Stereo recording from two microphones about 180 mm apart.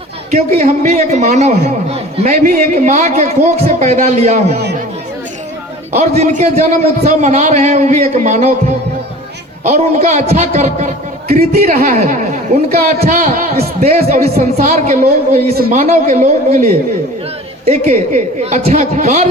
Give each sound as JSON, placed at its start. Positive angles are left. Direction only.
{"t": 0.6, "sound": "a man's voice", "side_deg": -45}
{"t": 2.3, "sound": "a man's voice", "side_deg": -50}
{"t": 5.9, "sound": "a man's voice", "side_deg": -40}
{"t": 9.6, "sound": "a man's voice", "side_deg": -45}
{"t": 13.8, "sound": "a man's voice", "side_deg": -40}
{"t": 14.3, "sound": "a woman's voice", "side_deg": -50}
{"t": 17.7, "sound": "a man's voice", "side_deg": -40}